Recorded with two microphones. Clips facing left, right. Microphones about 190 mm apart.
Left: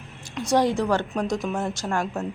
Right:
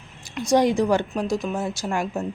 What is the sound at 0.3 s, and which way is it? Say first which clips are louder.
A woman's voice: right 2 dB; 15° right (ahead or behind).